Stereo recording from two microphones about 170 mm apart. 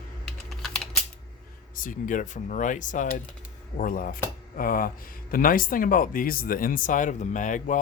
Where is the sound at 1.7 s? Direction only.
50° left (ahead or behind).